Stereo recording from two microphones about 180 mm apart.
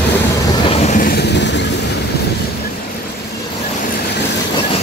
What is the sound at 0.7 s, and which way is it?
Vehicle, 35° left (ahead or behind).